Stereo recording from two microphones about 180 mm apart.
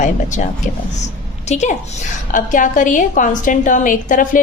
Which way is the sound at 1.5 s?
40° left (ahead or behind).